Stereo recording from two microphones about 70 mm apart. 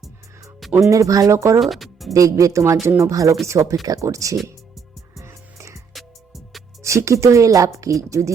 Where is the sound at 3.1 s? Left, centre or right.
Right.